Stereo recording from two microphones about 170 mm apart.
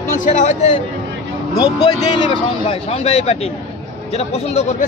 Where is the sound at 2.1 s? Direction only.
30° left (ahead or behind).